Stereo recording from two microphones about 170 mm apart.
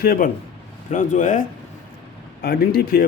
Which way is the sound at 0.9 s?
45° left (ahead or behind).